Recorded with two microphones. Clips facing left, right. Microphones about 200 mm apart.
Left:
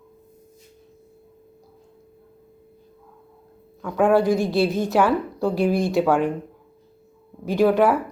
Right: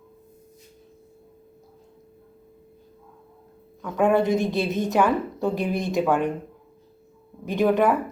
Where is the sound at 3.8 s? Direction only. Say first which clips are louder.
Left 2 dB; centre (ahead or behind).